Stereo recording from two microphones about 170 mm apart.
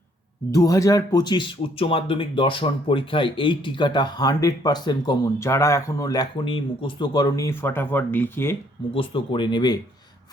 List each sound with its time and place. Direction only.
0.5 s speech: 20° left (ahead or behind)
9.0 s speech: 30° left (ahead or behind)